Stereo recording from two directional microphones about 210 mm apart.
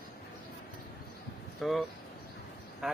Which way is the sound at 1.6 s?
Centre (ahead or behind).